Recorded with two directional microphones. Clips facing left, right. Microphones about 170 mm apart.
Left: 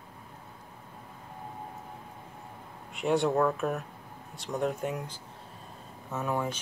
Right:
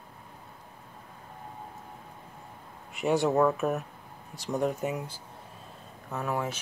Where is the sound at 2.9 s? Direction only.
Centre (ahead or behind).